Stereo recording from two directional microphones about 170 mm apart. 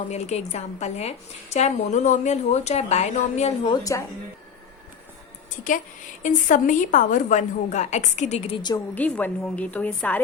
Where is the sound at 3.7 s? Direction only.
20° left (ahead or behind).